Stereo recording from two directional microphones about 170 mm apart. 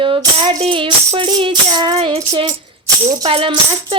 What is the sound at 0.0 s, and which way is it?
Music, 30° right (ahead or behind).